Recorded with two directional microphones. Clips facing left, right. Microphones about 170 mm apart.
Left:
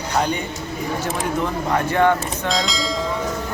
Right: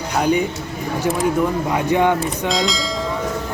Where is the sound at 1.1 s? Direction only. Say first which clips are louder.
Right 5 dB; 10° right (ahead or behind).